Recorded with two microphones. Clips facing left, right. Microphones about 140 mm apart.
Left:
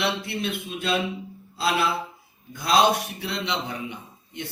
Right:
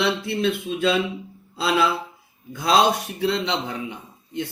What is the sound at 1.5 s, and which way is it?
Music, 90° right.